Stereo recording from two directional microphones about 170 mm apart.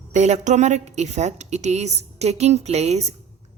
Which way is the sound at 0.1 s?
45° right (ahead or behind).